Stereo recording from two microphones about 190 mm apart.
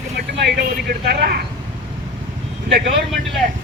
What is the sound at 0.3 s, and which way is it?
Speech, 60° right (ahead or behind).